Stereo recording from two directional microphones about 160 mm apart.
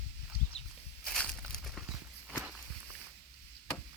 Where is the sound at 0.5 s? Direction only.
40° left (ahead or behind).